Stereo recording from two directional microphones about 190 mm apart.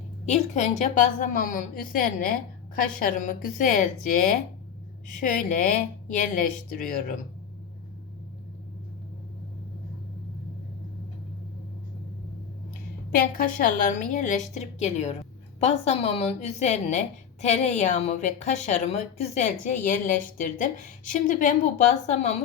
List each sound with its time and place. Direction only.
0.3 s a woman's voice: 40° left (ahead or behind)
13.1 s a woman's voice: 50° left (ahead or behind)